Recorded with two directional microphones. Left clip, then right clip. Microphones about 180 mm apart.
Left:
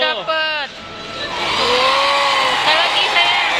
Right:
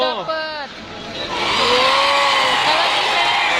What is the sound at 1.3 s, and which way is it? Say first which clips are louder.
Vehicle: even; centre (ahead or behind).